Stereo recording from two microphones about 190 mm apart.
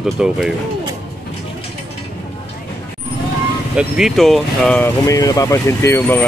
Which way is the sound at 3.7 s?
5° right (ahead or behind).